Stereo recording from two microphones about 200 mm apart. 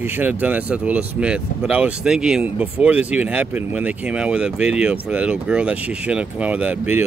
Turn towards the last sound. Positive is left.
turn(degrees=-5)  # may be behind; listen again after turning